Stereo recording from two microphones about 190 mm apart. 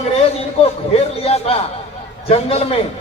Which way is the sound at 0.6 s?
35° left (ahead or behind).